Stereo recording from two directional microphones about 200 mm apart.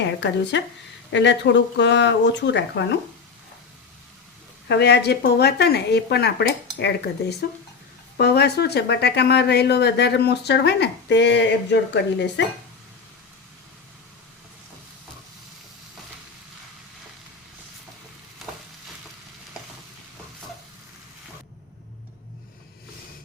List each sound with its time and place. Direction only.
0.0 s speech: 60° left (ahead or behind)
4.7 s speech: 55° left (ahead or behind)